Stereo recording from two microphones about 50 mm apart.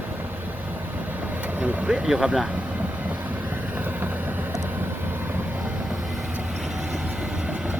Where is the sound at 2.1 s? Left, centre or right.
Centre.